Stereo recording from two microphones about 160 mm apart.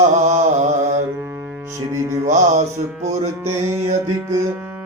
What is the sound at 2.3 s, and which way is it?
Mantra, 50° right (ahead or behind).